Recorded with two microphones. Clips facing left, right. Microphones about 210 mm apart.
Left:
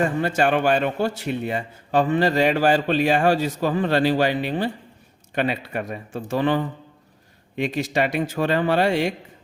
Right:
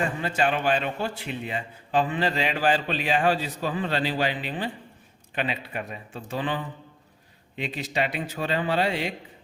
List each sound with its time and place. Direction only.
0.0 s a man's voice: 45° left (ahead or behind)